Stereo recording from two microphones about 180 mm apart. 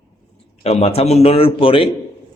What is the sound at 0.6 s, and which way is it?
A man's voice, 35° left (ahead or behind).